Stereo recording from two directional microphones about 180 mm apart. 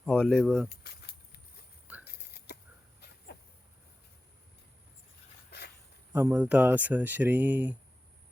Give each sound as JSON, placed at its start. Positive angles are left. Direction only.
{"t": 0.0, "sound": "speech", "side_deg": 5}
{"t": 0.9, "sound": "a sound", "side_deg": 65}
{"t": 5.5, "sound": "walk", "side_deg": 65}
{"t": 6.1, "sound": "speech", "side_deg": -10}